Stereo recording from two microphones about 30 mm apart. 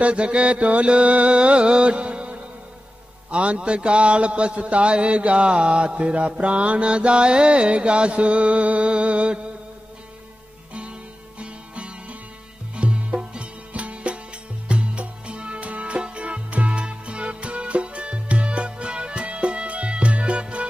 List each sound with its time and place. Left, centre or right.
0.0 s a man's voice: right
11.3 s music: right
15.9 s music: right
16.7 s music: right